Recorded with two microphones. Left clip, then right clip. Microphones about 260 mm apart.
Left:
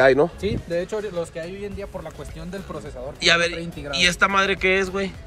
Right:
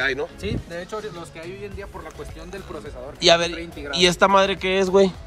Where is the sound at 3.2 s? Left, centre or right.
Centre.